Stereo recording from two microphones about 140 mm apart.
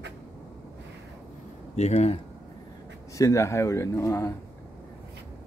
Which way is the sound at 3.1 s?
20° left (ahead or behind).